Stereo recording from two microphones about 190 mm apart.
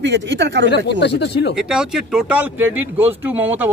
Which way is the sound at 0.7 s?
65° left (ahead or behind).